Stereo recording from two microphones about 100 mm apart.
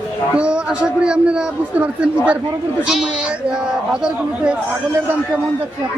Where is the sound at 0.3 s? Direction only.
10° right (ahead or behind).